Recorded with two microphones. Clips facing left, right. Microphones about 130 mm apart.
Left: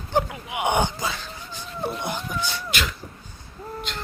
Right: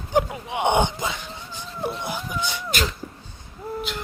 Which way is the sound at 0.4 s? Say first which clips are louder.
Right 2 dB; 25° right (ahead or behind).